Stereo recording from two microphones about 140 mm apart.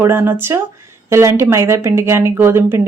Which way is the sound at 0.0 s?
15° right (ahead or behind).